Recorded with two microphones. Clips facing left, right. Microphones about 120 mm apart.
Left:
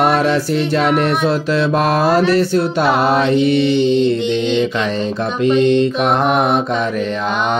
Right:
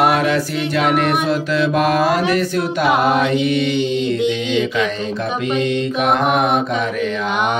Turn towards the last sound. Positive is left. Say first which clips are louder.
# left 1 dB
turn(degrees=35)  # may be behind; listen again after turning